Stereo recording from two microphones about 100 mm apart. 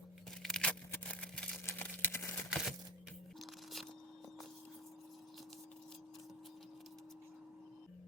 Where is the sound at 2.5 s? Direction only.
5° right (ahead or behind).